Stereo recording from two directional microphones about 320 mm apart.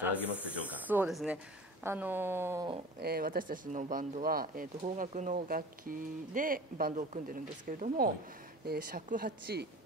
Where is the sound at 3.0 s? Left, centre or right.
Right.